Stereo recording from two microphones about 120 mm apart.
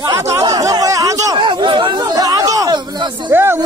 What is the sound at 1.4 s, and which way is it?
Chatter, 40° right (ahead or behind).